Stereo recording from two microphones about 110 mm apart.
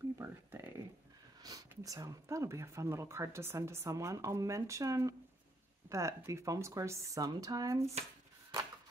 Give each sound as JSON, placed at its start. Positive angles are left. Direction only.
{"t": 0.2, "sound": "speech", "side_deg": -25}